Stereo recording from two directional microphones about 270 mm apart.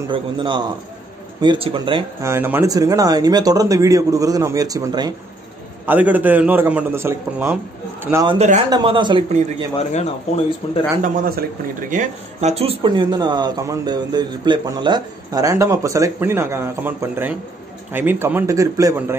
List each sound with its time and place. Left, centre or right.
0.1 s speech: centre
9.9 s speech: left
11.0 s a man's voice: right; by 19.1 s centre